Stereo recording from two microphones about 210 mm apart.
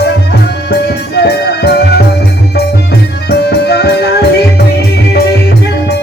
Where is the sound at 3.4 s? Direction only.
50° left (ahead or behind).